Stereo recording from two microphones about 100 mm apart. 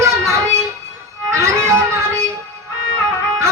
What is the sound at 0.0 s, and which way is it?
Child singing, 30° right (ahead or behind).